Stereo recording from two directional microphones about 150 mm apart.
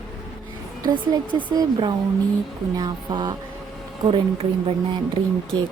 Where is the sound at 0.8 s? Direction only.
30° right (ahead or behind).